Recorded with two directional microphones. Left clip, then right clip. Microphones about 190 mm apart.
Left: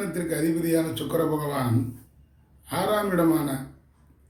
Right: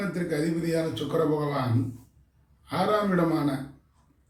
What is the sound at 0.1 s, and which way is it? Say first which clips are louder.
Speech: left 2 dB; 15° left (ahead or behind).